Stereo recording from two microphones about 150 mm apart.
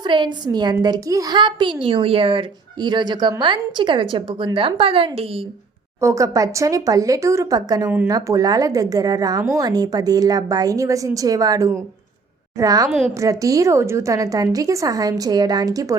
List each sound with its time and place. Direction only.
0.0 s a child's voice: 30° right (ahead or behind)
6.0 s a woman's voice: 20° right (ahead or behind)
7.9 s speech: 15° right (ahead or behind)
8.1 s a woman's voice: 25° right (ahead or behind)